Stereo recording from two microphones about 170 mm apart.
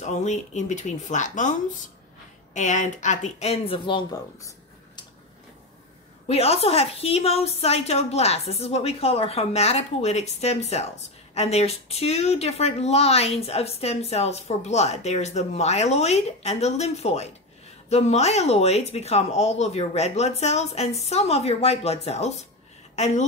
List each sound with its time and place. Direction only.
0.0 s speech: 45° left (ahead or behind); by 4.5 s 25° left (ahead or behind)
6.2 s a woman's voice: 40° left (ahead or behind)